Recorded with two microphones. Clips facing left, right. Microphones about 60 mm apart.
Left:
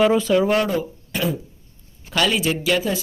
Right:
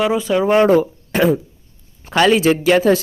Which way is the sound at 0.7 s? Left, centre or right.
Right.